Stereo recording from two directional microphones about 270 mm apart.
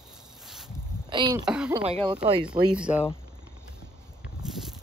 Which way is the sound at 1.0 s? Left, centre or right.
Centre.